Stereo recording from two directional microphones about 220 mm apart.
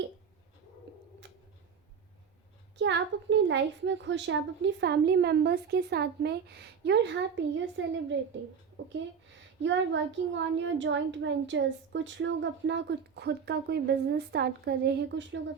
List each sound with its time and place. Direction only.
2.7 s a child's voice: 55° right (ahead or behind)